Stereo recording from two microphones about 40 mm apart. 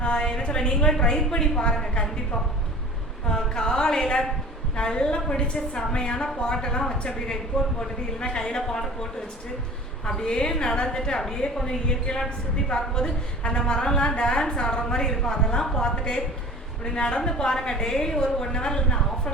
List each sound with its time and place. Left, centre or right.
0.0 s a sound: left
0.9 s a woman's voice: centre
3.2 s a woman's voice: centre
10.2 s a woman's voice: left